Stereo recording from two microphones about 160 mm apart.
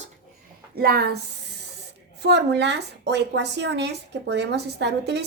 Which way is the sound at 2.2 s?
90° right.